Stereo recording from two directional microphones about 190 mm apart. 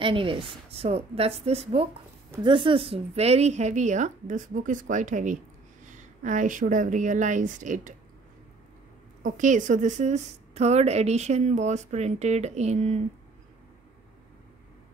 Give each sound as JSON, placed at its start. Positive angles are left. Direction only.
{"t": 0.0, "sound": "a woman's voice", "side_deg": -25}
{"t": 9.2, "sound": "a woman's voice", "side_deg": -40}